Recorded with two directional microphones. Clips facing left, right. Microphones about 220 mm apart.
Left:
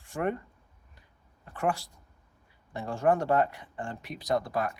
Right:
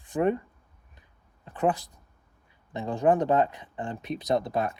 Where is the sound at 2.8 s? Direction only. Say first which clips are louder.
Right 3 dB; 20° right (ahead or behind).